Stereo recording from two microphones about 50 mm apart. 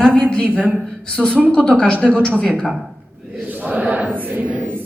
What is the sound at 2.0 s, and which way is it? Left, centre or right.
Speech, centre.